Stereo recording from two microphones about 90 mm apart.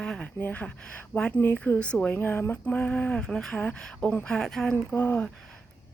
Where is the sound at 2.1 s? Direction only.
25° left (ahead or behind).